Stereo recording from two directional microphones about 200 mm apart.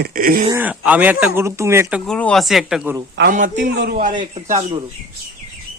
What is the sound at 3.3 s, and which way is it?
Speech, 40° right (ahead or behind).